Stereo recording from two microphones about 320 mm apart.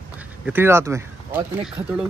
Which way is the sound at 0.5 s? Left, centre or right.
Centre.